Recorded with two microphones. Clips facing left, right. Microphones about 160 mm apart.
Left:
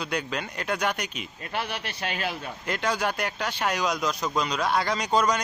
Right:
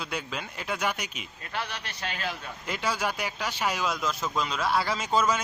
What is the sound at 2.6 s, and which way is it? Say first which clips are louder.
Speech: left 3 dB; 5° right (ahead or behind).